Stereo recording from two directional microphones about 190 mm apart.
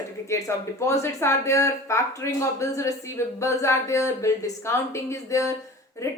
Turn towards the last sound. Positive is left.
turn(degrees=15)  # may be behind; listen again after turning